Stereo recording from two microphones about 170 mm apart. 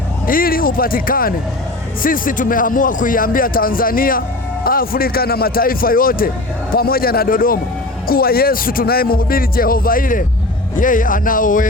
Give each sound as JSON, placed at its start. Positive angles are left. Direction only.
{"t": 0.3, "sound": "speech", "side_deg": 55}